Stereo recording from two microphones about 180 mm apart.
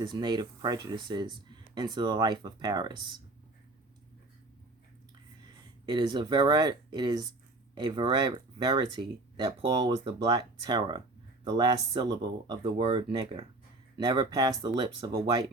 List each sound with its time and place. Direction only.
0.0 s speech: 25° right (ahead or behind)
5.9 s speech: 25° right (ahead or behind)